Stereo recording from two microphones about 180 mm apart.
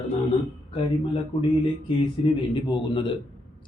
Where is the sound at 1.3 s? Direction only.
30° left (ahead or behind).